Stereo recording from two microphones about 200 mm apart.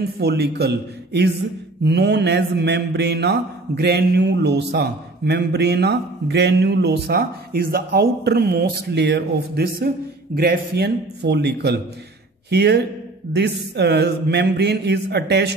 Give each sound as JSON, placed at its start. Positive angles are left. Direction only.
{"t": 0.0, "sound": "mantra", "side_deg": -55}
{"t": 12.4, "sound": "speech", "side_deg": -55}
{"t": 13.3, "sound": "mantra", "side_deg": -55}